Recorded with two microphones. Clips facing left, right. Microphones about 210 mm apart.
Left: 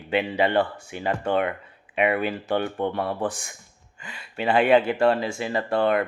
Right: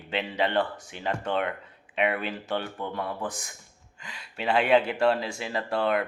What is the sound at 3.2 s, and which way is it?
Speech, 30° left (ahead or behind).